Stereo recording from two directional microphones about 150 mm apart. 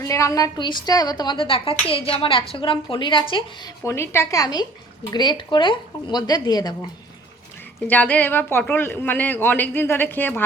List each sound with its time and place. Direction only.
0.0 s a woman's voice: 20° left (ahead or behind)
3.8 s a woman's voice: 15° left (ahead or behind)
7.9 s speech: 10° left (ahead or behind)